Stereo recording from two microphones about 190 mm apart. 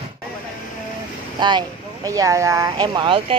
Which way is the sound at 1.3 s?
25° right (ahead or behind).